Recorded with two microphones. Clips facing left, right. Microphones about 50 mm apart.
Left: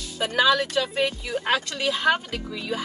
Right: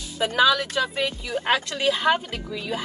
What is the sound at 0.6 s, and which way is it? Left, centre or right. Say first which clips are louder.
Speech: left 1 dB; left.